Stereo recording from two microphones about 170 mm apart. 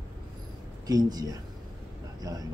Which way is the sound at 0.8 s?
20° right (ahead or behind).